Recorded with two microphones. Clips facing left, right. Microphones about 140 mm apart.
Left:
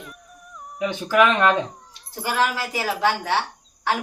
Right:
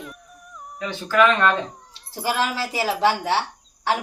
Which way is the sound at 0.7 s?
15° left (ahead or behind).